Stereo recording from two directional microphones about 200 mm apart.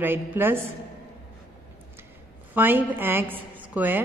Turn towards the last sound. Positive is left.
turn(degrees=-10)  # may be behind; listen again after turning